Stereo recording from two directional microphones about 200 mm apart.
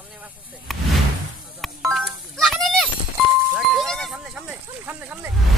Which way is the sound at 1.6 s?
Centre (ahead or behind).